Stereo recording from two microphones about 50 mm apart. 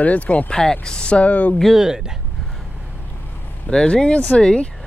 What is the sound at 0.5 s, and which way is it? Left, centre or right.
Speech, centre.